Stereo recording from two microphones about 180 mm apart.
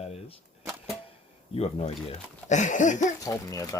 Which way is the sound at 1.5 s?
35° left (ahead or behind).